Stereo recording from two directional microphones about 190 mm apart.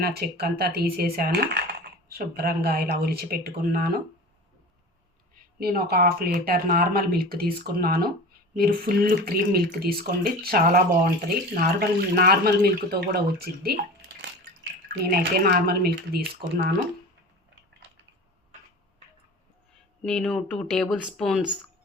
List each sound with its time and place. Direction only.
0.0 s speech: 55° right (ahead or behind)
5.5 s speech: 55° right (ahead or behind)
20.1 s speech: 5° left (ahead or behind)